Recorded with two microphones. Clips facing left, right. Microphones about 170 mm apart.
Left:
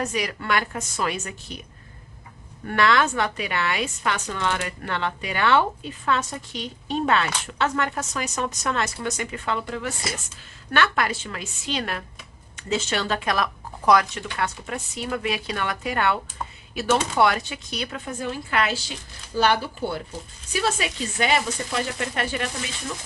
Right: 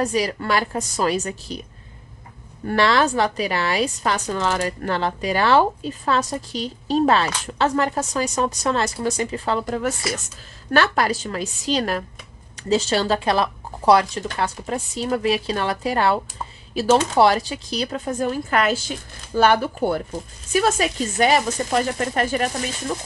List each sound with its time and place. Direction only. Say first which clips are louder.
0.0 s a woman's voice: right 6 dB; 35° right (ahead or behind)
2.6 s a woman's voice: right 3 dB; 35° right (ahead or behind)